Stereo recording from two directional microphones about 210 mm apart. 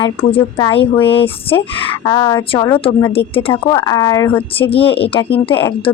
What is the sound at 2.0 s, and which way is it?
A woman's voice, 15° left (ahead or behind).